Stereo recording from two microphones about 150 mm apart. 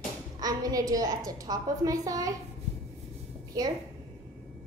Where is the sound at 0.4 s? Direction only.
25° right (ahead or behind).